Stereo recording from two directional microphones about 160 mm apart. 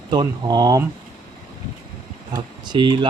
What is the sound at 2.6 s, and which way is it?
Speech, 25° right (ahead or behind).